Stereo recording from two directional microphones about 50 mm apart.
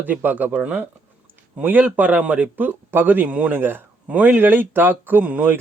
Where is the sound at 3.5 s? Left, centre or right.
Right.